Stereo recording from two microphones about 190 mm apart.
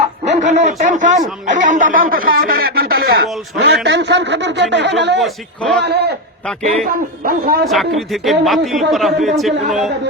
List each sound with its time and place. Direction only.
0.3 s speech: 40° right (ahead or behind); by 5.2 s 65° right (ahead or behind)
5.2 s a man's voice: centre (ahead or behind)
5.8 s a man's voice: 60° right (ahead or behind)
7.3 s a man's voice: 50° right (ahead or behind)
7.6 s a man's voice: centre (ahead or behind)